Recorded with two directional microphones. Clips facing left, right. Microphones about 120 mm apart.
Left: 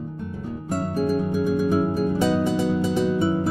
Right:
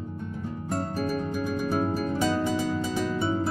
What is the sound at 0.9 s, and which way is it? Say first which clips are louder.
Music: left 9 dB; 15° left (ahead or behind).